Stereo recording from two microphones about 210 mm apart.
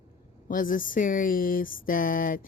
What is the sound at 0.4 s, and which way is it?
A woman's voice, 40° left (ahead or behind).